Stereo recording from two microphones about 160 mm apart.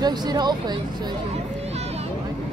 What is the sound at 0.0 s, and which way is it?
Speech, 25° right (ahead or behind).